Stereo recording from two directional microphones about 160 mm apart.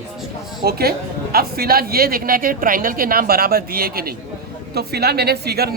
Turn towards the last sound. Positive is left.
turn(degrees=-80)